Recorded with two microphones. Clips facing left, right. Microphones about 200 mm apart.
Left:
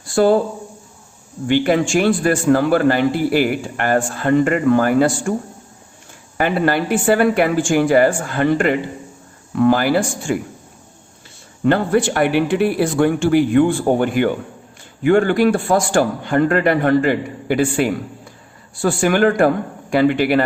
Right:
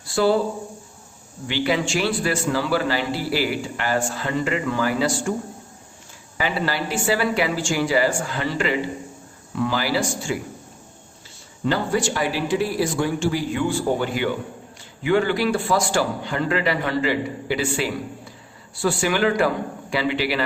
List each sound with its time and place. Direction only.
0.0 s speech: 50° left (ahead or behind)
1.5 s a man's voice: 50° left (ahead or behind)
6.3 s a man's voice: 55° left (ahead or behind)
11.6 s a man's voice: 55° left (ahead or behind)